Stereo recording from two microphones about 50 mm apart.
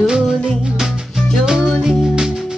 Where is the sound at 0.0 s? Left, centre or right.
Centre.